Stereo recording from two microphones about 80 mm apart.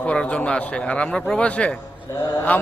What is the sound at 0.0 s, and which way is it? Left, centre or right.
A man's voice, centre.